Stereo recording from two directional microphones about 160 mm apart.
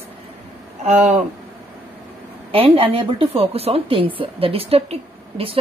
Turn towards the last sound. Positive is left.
turn(degrees=-35)  # may be behind; listen again after turning